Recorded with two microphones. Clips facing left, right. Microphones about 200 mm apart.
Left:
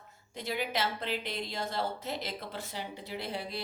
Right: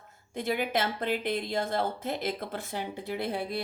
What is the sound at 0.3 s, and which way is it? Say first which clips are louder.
A woman's voice: right 5 dB; 50° right (ahead or behind).